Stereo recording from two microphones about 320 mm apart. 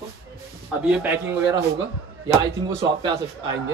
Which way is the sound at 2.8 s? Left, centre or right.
Centre.